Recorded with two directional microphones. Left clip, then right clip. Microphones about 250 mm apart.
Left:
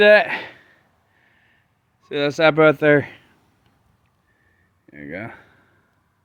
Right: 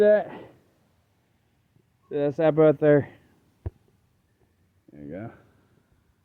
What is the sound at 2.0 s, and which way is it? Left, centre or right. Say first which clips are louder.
Speech: left 6 dB; centre.